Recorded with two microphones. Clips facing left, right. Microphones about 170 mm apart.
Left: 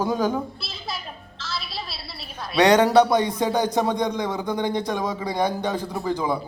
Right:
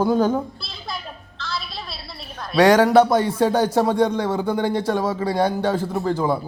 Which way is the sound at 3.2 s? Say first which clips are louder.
Right 4 dB; 15° left (ahead or behind).